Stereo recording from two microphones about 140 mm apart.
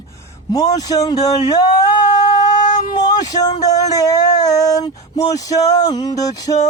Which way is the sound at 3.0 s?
25° left (ahead or behind).